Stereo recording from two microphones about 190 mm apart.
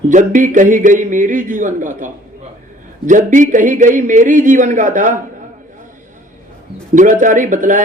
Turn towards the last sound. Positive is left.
turn(degrees=-40)  # may be behind; listen again after turning